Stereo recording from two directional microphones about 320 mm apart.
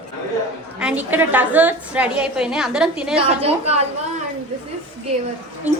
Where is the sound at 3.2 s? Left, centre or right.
Centre.